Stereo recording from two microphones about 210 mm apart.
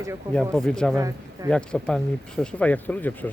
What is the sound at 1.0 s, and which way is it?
Speech, 15° right (ahead or behind).